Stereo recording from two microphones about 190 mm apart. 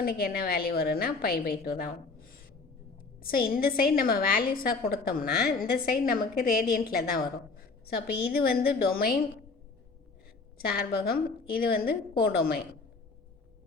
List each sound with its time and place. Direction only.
0.0 s a woman's voice: 50° left (ahead or behind)
1.8 s a sound: 50° left (ahead or behind)
3.2 s a woman's voice: 50° left (ahead or behind)
10.6 s a woman's voice: 50° left (ahead or behind)